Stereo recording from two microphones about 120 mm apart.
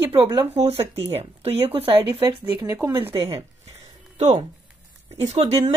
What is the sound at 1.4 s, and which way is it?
Speech, 55° right (ahead or behind).